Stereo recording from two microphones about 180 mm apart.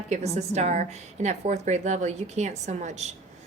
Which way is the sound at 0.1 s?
40° right (ahead or behind).